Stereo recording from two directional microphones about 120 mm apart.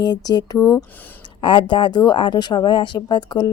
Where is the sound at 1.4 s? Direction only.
45° left (ahead or behind).